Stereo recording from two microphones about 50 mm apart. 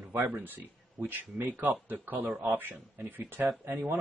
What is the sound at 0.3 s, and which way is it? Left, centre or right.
Speech, right.